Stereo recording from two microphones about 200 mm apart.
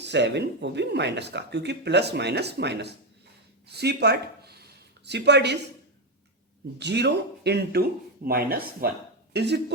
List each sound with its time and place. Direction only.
0.0 s speech: 60° right (ahead or behind)
6.7 s speech: 55° right (ahead or behind)